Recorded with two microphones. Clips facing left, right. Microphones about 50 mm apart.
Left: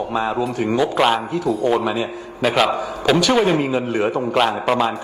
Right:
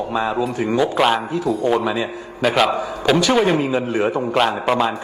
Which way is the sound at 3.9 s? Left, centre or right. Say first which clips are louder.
Even; right.